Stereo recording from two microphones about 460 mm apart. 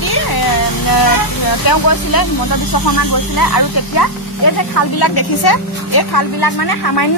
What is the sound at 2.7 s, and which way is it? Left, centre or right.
Speech, left.